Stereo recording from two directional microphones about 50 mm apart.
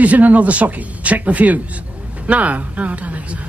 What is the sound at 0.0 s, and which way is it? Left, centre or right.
A man's voice, right.